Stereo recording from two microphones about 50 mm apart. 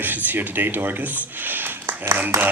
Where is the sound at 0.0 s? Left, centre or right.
Right.